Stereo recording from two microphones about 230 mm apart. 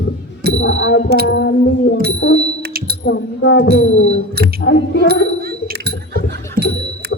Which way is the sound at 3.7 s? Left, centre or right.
Left.